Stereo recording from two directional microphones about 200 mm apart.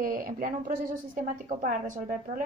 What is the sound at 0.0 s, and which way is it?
A woman's voice, 45° right (ahead or behind).